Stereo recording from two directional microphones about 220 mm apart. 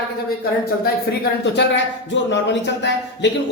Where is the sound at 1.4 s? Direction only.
55° left (ahead or behind).